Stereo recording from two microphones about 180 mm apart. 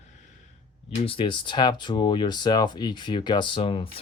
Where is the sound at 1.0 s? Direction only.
30° left (ahead or behind).